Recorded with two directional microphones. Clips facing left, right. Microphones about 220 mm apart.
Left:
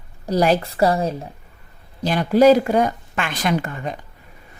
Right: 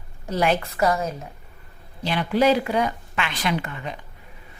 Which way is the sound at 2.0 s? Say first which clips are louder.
Left 6 dB; 45° left (ahead or behind).